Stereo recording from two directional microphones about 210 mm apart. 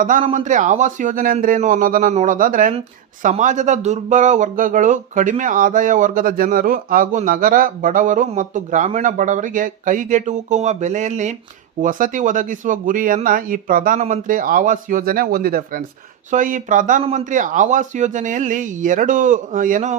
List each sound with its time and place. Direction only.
0.0 s speech: 40° right (ahead or behind)